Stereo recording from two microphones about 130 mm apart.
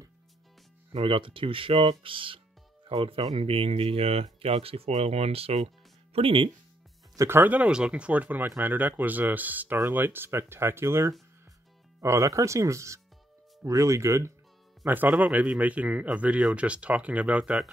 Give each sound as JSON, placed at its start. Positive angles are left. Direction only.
{"t": 0.9, "sound": "speech", "side_deg": -45}
{"t": 3.3, "sound": "speech", "side_deg": -50}
{"t": 7.2, "sound": "speech", "side_deg": -20}
{"t": 14.9, "sound": "speech", "side_deg": -15}